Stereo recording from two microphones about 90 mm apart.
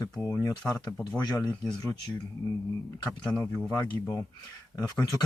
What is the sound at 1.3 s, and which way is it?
Speech, 45° left (ahead or behind).